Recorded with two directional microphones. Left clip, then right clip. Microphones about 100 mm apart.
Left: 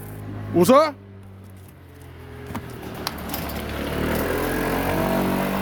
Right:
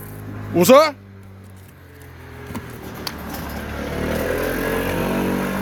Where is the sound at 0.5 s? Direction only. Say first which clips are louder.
Right 4 dB; 5° left (ahead or behind).